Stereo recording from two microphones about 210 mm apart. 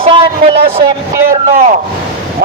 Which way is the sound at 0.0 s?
25° right (ahead or behind).